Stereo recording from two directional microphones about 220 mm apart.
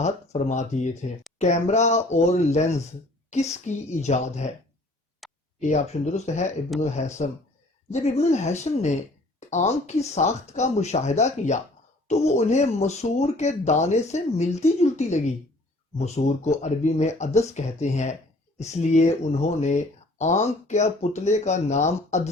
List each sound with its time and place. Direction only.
0.0 s speech: 30° left (ahead or behind)
5.2 s a sound: centre (ahead or behind)
5.5 s speech: 30° left (ahead or behind)